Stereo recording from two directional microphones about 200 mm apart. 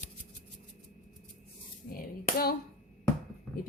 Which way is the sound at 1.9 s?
45° left (ahead or behind).